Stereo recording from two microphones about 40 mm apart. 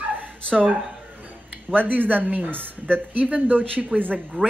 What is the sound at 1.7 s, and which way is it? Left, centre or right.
Speech, right.